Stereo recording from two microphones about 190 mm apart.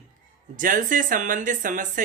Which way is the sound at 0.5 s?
45° right (ahead or behind).